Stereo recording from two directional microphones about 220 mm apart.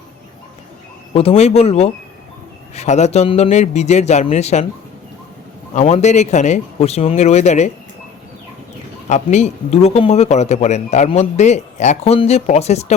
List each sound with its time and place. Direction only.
1.1 s speech: 25° left (ahead or behind)
5.7 s speech: 30° left (ahead or behind)
9.0 s speech: 30° left (ahead or behind)